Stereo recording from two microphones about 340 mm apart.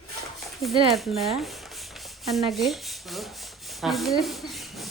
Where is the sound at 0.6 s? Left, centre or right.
Centre.